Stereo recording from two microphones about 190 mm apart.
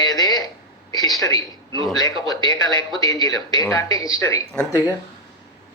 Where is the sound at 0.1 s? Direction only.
20° left (ahead or behind).